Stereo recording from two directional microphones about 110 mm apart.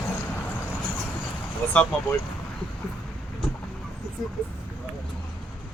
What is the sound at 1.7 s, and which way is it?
Speech, 10° left (ahead or behind).